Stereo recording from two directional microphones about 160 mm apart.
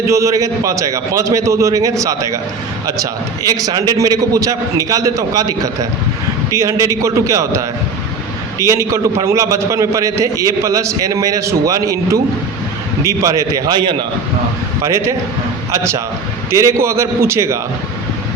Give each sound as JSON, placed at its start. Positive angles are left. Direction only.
{"t": 0.1, "sound": "a man's voice", "side_deg": -20}
{"t": 13.2, "sound": "a man's voice", "side_deg": -20}